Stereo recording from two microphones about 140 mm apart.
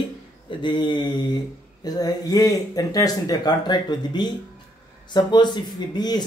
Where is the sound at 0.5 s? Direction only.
35° left (ahead or behind).